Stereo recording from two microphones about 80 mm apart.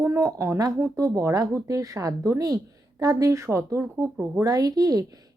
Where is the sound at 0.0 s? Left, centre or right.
Right.